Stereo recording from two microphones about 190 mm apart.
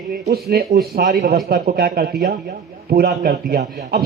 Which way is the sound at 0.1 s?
55° right (ahead or behind).